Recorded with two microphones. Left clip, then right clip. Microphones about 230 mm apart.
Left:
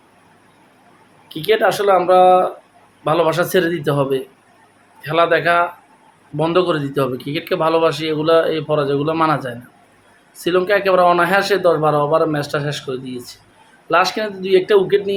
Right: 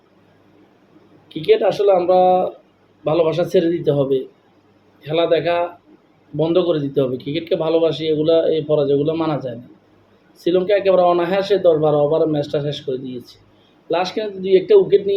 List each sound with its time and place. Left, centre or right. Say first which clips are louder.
1.3 s a man's voice: even; centre
5.0 s a man's voice: left 2 dB; centre
13.9 s a man's voice: left 4 dB; centre